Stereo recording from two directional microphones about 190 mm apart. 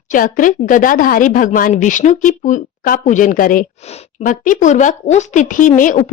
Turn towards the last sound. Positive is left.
turn(degrees=45)  # may be behind; listen again after turning